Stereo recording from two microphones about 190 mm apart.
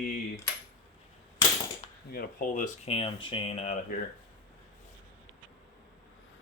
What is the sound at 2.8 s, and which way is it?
Speech, 30° left (ahead or behind).